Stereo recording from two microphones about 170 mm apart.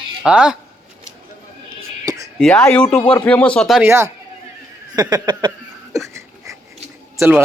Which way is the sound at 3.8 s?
15° right (ahead or behind).